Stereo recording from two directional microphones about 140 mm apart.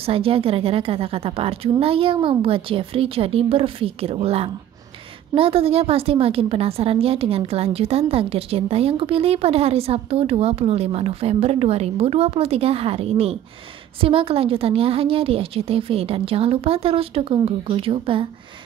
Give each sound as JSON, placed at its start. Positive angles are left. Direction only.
{"t": 0.0, "sound": "a woman's voice", "side_deg": -40}